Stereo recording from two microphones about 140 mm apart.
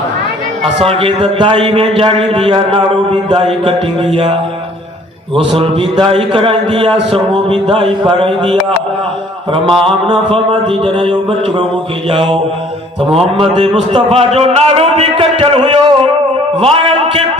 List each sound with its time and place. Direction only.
0.8 s mantra: 40° right (ahead or behind)
3.6 s mantra: 35° right (ahead or behind)
9.5 s mantra: 40° right (ahead or behind)
13.1 s a man's voice: 45° right (ahead or behind)